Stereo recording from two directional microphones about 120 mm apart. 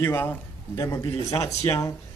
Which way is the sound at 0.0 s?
20° left (ahead or behind).